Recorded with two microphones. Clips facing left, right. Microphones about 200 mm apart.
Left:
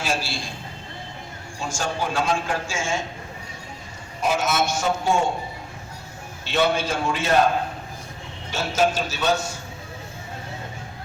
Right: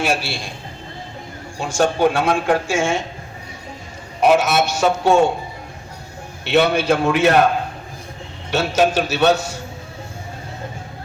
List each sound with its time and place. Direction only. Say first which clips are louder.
0.0 s a man's voice: right 5 dB; 65° right (ahead or behind)
1.5 s a man's voice: right 9 dB; 65° right (ahead or behind)
4.2 s a man's voice: right 7 dB; 65° right (ahead or behind)
6.4 s a man's voice: right 6 dB; 65° right (ahead or behind)
8.4 s a man's voice: right 5 dB; 70° right (ahead or behind)